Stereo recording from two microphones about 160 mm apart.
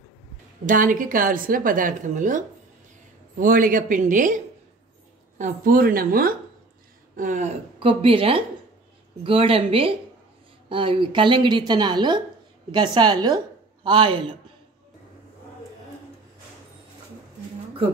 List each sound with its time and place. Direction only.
0.7 s a woman's voice: 55° right (ahead or behind)
5.4 s a woman's voice: 60° right (ahead or behind)
7.2 s speech: 50° right (ahead or behind)
7.8 s a woman's voice: 35° right (ahead or behind)